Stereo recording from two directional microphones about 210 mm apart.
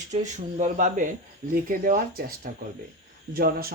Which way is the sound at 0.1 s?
35° right (ahead or behind).